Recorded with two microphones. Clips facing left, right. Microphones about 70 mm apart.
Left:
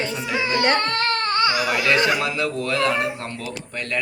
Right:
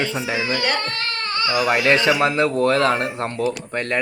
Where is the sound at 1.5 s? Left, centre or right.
Right.